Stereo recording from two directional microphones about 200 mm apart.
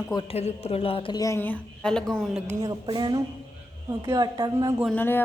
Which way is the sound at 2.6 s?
20° right (ahead or behind).